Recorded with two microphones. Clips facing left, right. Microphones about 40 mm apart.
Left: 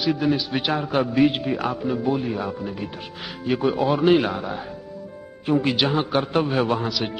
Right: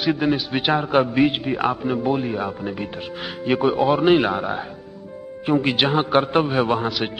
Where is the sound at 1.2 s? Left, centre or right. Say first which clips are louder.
Even; centre.